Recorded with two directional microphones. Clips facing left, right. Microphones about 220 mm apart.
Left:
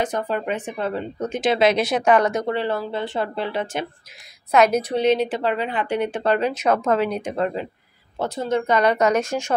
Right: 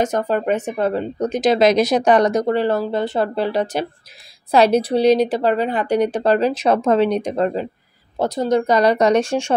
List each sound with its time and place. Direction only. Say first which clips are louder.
0.0 s speech: right 5 dB; 40° right (ahead or behind)